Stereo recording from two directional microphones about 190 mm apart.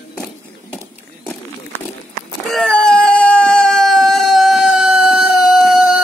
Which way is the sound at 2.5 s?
5° left (ahead or behind).